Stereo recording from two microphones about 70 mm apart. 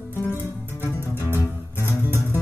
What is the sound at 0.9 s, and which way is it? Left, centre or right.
Music, right.